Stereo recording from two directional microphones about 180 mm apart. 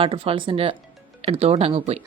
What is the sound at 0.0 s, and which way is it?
Speech, 30° right (ahead or behind).